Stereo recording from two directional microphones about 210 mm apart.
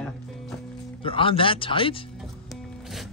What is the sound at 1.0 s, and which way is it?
Speech, 25° left (ahead or behind).